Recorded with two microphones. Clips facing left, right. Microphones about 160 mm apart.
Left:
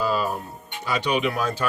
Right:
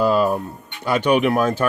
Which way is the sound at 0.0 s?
55° right (ahead or behind).